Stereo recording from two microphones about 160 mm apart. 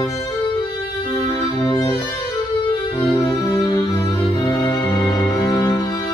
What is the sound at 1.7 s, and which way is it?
Music, 25° left (ahead or behind).